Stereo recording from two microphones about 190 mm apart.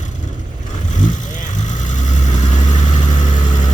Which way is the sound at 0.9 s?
40° left (ahead or behind).